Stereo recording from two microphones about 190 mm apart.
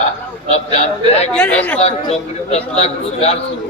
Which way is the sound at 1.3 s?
5° left (ahead or behind).